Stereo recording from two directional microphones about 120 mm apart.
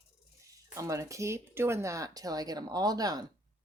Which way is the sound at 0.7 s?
25° right (ahead or behind).